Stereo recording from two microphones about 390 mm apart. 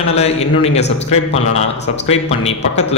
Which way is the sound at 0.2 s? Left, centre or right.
Centre.